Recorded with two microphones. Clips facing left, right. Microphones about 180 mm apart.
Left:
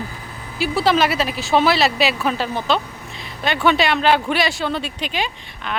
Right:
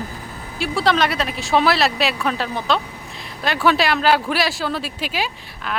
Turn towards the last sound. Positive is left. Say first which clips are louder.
# even
turn(degrees=-5)  # may be behind; listen again after turning